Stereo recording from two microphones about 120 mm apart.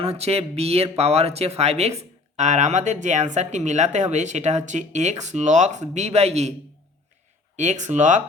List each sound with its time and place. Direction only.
0.0 s speech: 60° right (ahead or behind)
7.5 s speech: 80° right